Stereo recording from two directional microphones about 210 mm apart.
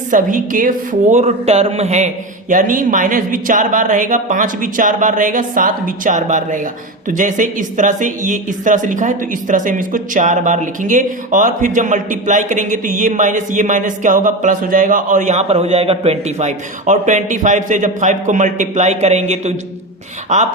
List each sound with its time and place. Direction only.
0.1 s speech: 40° right (ahead or behind)